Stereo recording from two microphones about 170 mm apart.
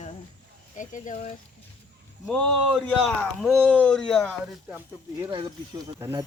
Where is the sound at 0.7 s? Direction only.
50° left (ahead or behind).